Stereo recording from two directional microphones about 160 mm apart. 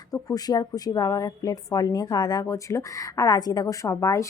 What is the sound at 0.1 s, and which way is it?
Speech, 25° left (ahead or behind).